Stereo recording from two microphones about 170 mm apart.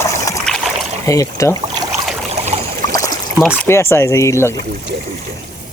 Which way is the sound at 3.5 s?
15° left (ahead or behind).